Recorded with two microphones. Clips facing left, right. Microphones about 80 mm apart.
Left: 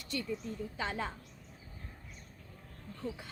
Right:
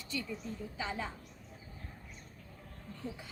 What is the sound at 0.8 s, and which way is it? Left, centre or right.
Speech, left.